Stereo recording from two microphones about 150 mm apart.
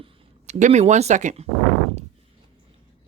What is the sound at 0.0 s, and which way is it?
Speech, 50° right (ahead or behind).